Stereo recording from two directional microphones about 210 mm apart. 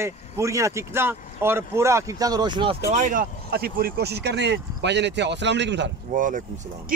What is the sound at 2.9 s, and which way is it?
Speech, 40° right (ahead or behind).